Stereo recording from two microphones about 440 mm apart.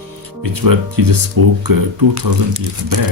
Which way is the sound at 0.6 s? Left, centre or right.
Right.